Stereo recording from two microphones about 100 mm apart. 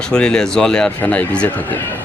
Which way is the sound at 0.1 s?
5° left (ahead or behind).